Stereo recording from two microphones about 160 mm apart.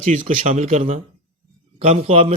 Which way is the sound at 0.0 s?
50° right (ahead or behind).